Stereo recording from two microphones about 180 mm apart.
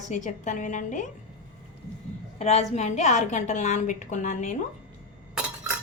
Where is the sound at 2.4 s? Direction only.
35° left (ahead or behind).